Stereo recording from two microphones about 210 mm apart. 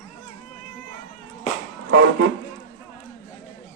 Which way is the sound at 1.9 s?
60° right (ahead or behind).